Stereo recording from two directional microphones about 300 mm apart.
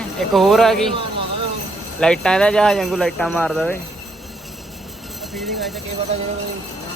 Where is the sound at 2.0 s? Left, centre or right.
Centre.